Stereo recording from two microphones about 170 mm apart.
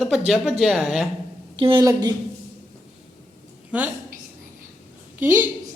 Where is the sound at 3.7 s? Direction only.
10° right (ahead or behind).